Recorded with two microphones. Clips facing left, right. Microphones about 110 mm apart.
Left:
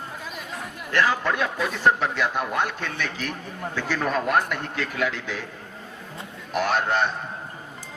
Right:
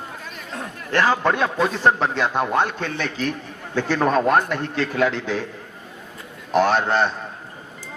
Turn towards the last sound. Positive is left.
turn(degrees=-30)  # may be behind; listen again after turning